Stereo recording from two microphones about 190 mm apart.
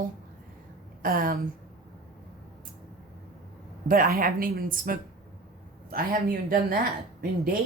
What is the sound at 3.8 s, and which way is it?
Speech, 50° right (ahead or behind).